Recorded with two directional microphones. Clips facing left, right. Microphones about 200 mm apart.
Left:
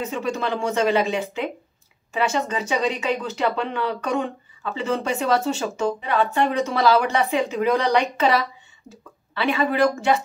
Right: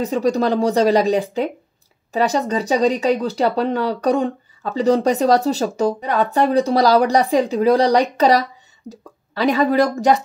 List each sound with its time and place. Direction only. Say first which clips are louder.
0.0 s speech: right 8 dB; 35° right (ahead or behind)